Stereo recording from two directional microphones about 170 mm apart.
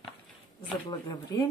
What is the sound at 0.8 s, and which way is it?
Speech, 30° left (ahead or behind).